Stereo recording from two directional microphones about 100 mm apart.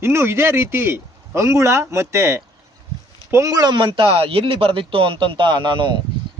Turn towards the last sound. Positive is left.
turn(degrees=-50)  # may be behind; listen again after turning